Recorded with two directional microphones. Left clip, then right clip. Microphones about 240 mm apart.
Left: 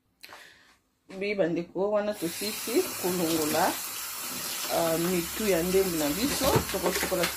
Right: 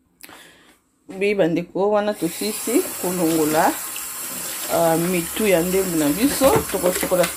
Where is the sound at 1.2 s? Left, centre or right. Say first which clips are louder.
Right 9 dB; right.